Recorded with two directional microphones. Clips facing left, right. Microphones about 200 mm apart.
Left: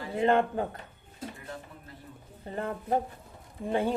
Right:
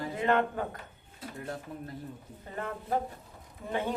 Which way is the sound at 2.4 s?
30° left (ahead or behind).